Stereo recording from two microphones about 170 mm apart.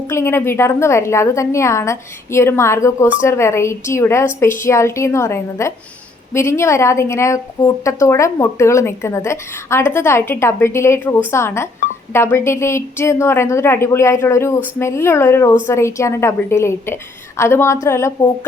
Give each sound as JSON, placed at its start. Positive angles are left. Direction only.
{"t": 0.1, "sound": "a woman's voice", "side_deg": 15}